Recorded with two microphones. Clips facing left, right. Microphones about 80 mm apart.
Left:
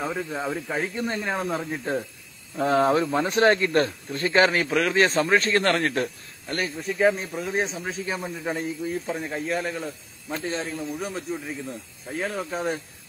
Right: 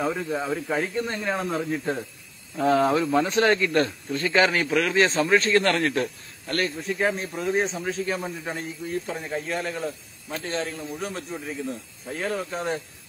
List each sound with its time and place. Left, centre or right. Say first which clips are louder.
0.0 s a man's voice: right 2 dB; centre
1.1 s speech: even; centre
2.5 s a man's voice: even; left
6.8 s a man's voice: left 3 dB; centre